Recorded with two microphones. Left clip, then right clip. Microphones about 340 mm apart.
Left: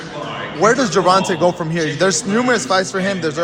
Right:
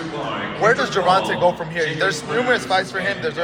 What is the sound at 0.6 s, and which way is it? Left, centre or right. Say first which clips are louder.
Speech: left 4 dB; left.